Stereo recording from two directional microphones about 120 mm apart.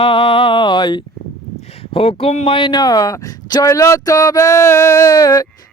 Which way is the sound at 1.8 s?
55° left (ahead or behind).